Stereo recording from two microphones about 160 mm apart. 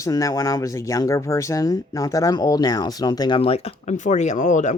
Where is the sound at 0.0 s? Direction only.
20° left (ahead or behind).